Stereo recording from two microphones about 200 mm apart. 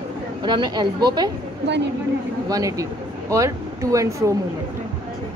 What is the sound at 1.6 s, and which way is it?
Speech, 60° right (ahead or behind).